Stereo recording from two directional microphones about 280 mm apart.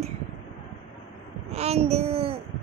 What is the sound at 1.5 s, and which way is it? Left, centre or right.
Speech, right.